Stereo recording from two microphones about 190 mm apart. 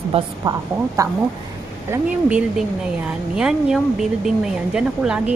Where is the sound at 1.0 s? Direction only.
15° right (ahead or behind).